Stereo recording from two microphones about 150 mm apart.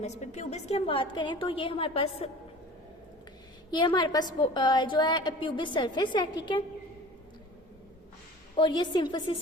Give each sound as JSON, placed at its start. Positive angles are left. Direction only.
{"t": 0.0, "sound": "a woman's voice", "side_deg": 50}
{"t": 3.7, "sound": "a woman's voice", "side_deg": 30}
{"t": 8.5, "sound": "a woman's voice", "side_deg": 30}